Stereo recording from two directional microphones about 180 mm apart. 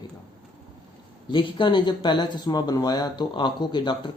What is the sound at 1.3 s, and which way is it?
Speech, 25° left (ahead or behind).